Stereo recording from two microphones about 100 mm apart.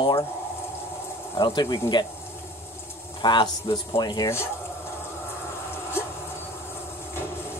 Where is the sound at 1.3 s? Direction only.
50° left (ahead or behind).